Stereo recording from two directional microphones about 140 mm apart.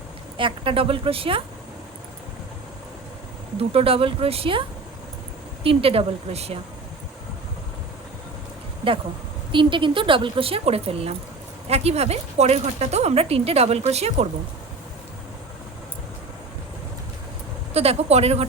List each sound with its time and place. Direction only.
0.3 s speech: 40° right (ahead or behind)
3.6 s speech: 45° right (ahead or behind)
5.6 s speech: 45° right (ahead or behind)
8.8 s speech: 40° right (ahead or behind)
17.7 s speech: 50° right (ahead or behind)